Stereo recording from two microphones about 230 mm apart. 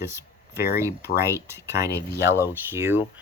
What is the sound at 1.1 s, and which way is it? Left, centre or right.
Speech, left.